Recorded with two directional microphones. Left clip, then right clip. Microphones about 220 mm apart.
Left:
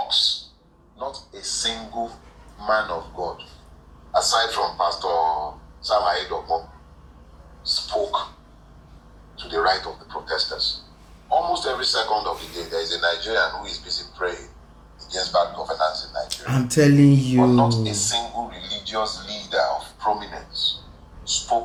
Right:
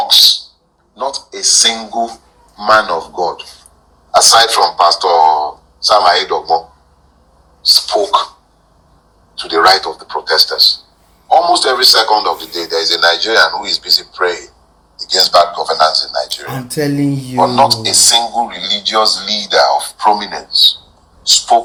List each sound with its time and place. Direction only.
0.9 s a sound: 45° right (ahead or behind)
2.6 s a man's voice: 45° right (ahead or behind)
7.7 s a man's voice: 45° right (ahead or behind)
9.3 s a man's voice: 45° right (ahead or behind)
16.7 s a sound: 5° left (ahead or behind)
17.4 s a man's voice: 45° right (ahead or behind)